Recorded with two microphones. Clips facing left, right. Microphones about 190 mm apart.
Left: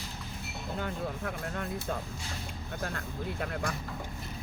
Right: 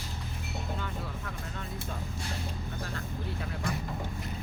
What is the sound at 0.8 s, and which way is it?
Speech, 50° left (ahead or behind).